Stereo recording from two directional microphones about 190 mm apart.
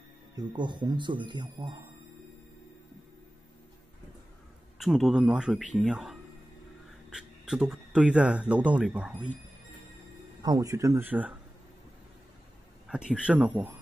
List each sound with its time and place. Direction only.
0.4 s speech: 25° right (ahead or behind)
4.7 s speech: centre (ahead or behind)
10.4 s speech: 20° right (ahead or behind)
12.8 s speech: 5° right (ahead or behind)